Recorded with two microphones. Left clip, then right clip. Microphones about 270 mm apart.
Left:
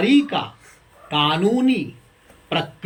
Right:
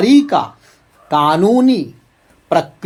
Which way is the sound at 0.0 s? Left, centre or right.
Right.